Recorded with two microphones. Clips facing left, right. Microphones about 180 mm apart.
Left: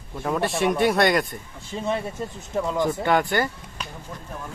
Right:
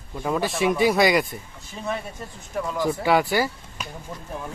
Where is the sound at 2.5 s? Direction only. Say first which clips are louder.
Left 3 dB; 25° left (ahead or behind).